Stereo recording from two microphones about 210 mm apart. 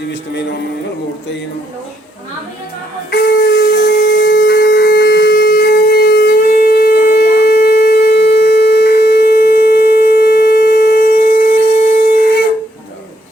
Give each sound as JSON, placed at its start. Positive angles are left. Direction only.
{"t": 0.1, "sound": "speech", "side_deg": 55}
{"t": 3.1, "sound": "wind instrument", "side_deg": 50}